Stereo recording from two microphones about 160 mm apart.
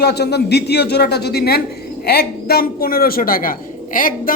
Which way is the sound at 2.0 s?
75° left (ahead or behind).